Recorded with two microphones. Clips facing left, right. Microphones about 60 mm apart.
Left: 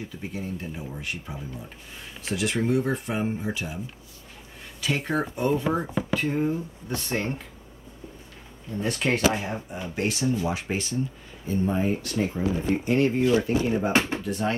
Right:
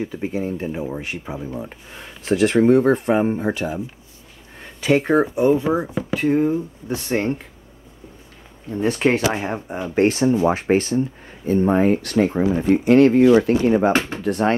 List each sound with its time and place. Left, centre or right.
0.0 s speech: right
4.7 s speech: right
5.1 s speech: centre
8.7 s speech: right
9.4 s speech: right